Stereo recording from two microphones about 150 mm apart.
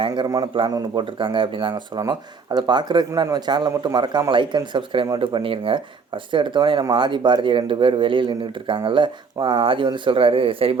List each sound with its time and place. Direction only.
0.0 s a man's voice: 30° right (ahead or behind)